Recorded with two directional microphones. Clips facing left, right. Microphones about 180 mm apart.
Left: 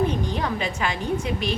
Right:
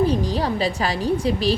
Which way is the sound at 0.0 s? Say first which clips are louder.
Right 4 dB; 35° right (ahead or behind).